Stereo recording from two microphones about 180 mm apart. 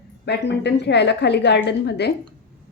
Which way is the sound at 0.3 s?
70° left (ahead or behind).